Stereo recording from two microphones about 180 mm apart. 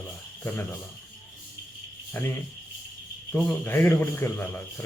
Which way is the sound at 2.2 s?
10° left (ahead or behind).